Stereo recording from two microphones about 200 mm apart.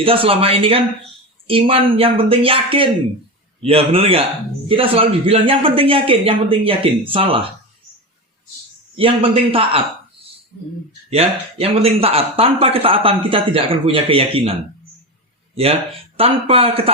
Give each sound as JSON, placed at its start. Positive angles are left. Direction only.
{"t": 0.0, "sound": "speech", "side_deg": -25}
{"t": 9.0, "sound": "speech", "side_deg": -25}
{"t": 11.1, "sound": "speech", "side_deg": -30}
{"t": 16.1, "sound": "speech", "side_deg": -30}